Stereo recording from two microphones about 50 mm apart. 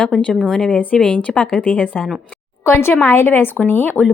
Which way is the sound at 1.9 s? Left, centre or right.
Centre.